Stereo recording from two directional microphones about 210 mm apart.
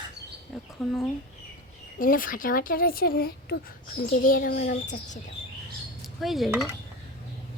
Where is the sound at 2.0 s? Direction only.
40° left (ahead or behind).